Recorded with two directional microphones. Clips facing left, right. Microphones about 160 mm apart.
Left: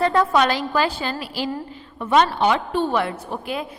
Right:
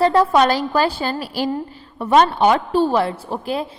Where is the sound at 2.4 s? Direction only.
40° right (ahead or behind).